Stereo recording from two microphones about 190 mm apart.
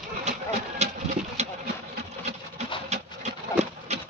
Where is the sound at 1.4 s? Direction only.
35° right (ahead or behind).